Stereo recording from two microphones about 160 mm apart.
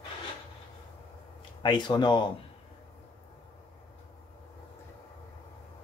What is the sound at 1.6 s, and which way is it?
Speech, 30° left (ahead or behind).